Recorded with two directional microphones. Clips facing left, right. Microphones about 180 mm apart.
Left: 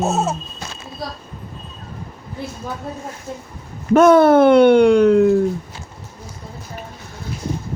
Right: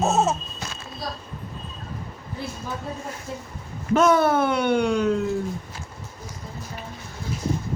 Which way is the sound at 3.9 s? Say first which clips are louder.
Left 8 dB; 60° left (ahead or behind).